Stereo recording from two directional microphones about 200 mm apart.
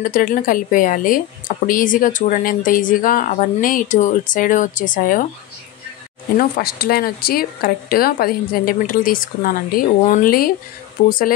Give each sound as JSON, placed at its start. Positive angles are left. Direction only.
{"t": 0.0, "sound": "speech", "side_deg": 45}
{"t": 6.3, "sound": "speech", "side_deg": 50}